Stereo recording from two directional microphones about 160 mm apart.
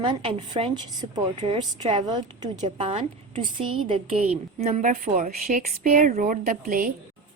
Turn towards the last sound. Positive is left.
turn(degrees=-60)  # may be behind; listen again after turning